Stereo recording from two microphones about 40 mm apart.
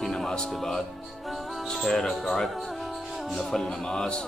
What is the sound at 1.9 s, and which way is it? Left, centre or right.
A man's voice, centre.